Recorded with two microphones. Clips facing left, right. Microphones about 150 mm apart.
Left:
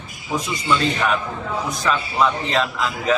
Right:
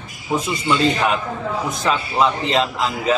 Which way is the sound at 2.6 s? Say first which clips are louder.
Right 2 dB; 35° right (ahead or behind).